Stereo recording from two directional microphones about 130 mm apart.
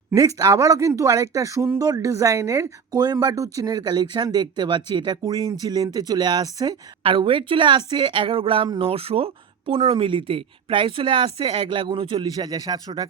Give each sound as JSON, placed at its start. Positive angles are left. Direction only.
{"t": 0.1, "sound": "speech", "side_deg": -25}
{"t": 7.0, "sound": "speech", "side_deg": -40}